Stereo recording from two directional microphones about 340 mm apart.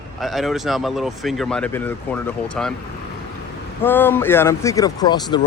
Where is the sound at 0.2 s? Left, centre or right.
Centre.